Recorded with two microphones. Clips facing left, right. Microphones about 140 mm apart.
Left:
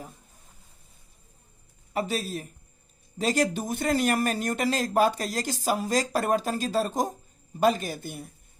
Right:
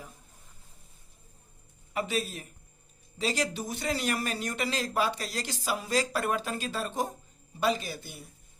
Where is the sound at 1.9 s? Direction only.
40° left (ahead or behind).